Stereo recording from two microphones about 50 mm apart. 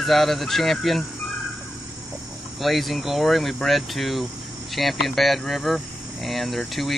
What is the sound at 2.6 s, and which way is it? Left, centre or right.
Speech, centre.